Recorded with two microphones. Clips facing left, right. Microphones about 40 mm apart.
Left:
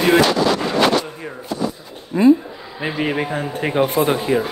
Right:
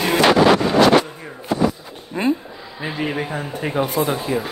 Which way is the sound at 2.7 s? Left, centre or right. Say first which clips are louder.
Left 3 dB; left.